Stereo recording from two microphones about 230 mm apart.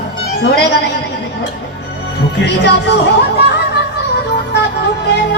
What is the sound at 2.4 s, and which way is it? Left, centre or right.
Music, left.